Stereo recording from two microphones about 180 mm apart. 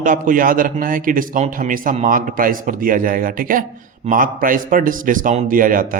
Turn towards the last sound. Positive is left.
turn(degrees=-50)  # may be behind; listen again after turning